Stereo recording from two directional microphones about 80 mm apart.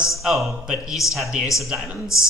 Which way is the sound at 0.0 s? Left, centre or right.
Centre.